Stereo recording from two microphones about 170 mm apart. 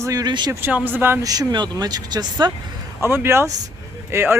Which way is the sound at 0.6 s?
10° right (ahead or behind).